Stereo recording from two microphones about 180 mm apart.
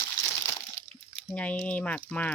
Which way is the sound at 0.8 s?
45° left (ahead or behind).